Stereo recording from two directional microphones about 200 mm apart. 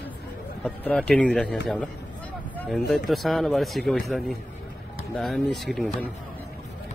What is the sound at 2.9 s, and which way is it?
A man's voice, centre (ahead or behind).